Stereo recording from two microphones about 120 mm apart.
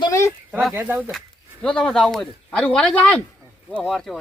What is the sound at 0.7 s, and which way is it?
Speech, 15° right (ahead or behind).